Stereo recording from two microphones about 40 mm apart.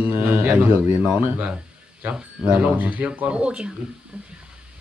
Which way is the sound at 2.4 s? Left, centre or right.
Right.